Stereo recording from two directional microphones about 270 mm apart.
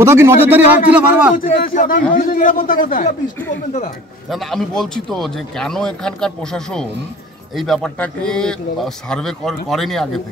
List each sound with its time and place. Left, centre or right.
0.0 s speech: centre
1.3 s a man's voice: left
4.3 s speech: centre